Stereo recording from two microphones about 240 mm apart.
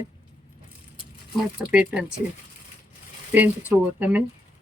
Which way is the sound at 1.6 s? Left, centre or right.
Centre.